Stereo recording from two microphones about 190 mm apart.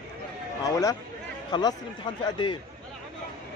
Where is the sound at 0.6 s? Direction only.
15° left (ahead or behind).